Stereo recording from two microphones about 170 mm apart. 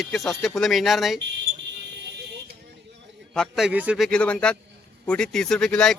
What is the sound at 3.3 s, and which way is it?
Speech, centre (ahead or behind).